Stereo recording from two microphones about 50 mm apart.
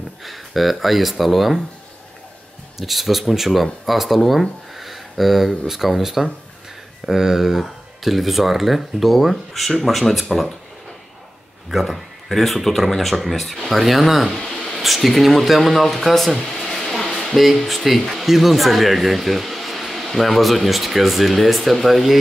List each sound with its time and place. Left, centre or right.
0.2 s speech: centre
2.8 s speech: centre
11.7 s speech: centre
14.3 s a sound: centre
14.8 s speech: centre